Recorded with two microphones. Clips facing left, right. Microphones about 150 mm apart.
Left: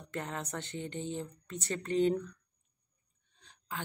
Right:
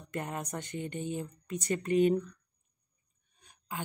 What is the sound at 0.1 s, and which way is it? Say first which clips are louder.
Speech: right 2 dB; 15° right (ahead or behind).